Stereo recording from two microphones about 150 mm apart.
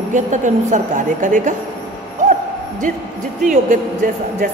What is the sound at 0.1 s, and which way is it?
A woman's voice, 55° right (ahead or behind).